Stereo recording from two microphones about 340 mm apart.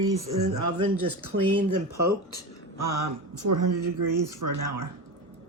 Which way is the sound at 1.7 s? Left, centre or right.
Right.